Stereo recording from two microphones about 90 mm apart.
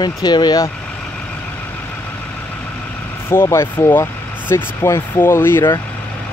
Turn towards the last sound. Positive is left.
turn(degrees=25)  # may be behind; listen again after turning